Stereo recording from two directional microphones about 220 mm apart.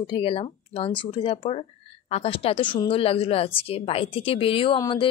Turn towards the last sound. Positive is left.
turn(degrees=20)  # may be behind; listen again after turning